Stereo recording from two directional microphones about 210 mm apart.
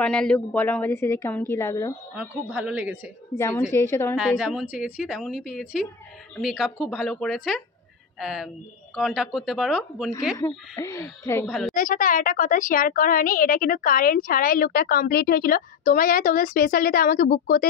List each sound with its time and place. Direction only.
0.0 s a woman's voice: 5° left (ahead or behind)
2.1 s a woman's voice: 5° right (ahead or behind)
3.3 s a woman's voice: 10° left (ahead or behind)
4.2 s a woman's voice: 5° right (ahead or behind)
10.3 s a woman's voice: 15° left (ahead or behind)
11.4 s a woman's voice: centre (ahead or behind)
11.7 s a woman's voice: 40° left (ahead or behind)